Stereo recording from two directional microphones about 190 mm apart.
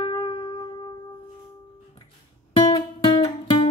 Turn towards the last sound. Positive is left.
turn(degrees=30)  # may be behind; listen again after turning